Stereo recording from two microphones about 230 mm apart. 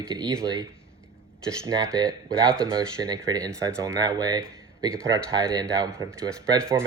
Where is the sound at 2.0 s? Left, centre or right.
Centre.